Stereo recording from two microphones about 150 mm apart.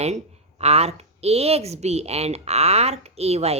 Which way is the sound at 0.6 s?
45° right (ahead or behind).